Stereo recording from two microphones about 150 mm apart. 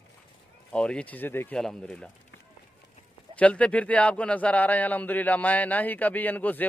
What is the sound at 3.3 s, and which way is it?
Speech, 10° left (ahead or behind).